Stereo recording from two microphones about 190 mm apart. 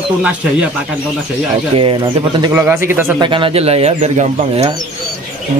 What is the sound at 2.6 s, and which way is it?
Speech, 10° right (ahead or behind).